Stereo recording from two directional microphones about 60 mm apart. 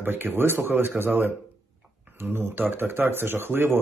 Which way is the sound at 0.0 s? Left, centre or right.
Right.